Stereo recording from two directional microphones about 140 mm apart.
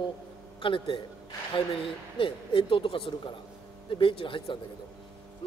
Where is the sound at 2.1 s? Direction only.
40° left (ahead or behind).